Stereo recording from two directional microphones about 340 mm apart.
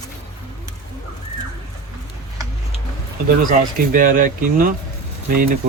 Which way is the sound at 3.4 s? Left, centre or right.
Right.